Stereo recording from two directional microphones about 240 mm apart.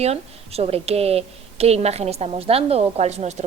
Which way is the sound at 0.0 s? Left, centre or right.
Right.